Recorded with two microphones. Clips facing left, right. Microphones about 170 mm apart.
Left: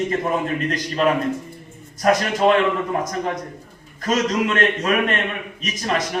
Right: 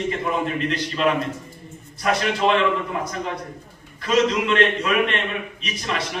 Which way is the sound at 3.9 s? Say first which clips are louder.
Right 1 dB; 45° left (ahead or behind).